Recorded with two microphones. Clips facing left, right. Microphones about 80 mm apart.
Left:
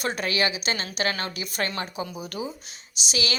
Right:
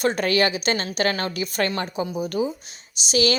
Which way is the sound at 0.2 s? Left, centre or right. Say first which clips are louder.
Right 5 dB; right.